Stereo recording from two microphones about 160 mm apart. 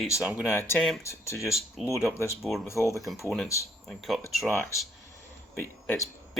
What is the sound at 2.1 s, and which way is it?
Speech, 15° left (ahead or behind).